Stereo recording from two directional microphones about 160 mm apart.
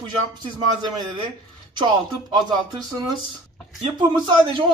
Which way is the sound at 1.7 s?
25° right (ahead or behind).